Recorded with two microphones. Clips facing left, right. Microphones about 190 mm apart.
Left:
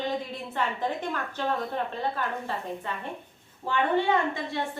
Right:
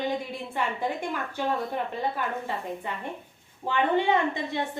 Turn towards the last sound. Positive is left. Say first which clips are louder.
# right 1 dB
turn(degrees=-20)  # may be behind; listen again after turning